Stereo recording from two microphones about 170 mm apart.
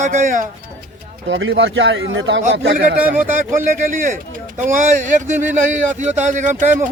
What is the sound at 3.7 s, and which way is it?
Speech, 50° right (ahead or behind).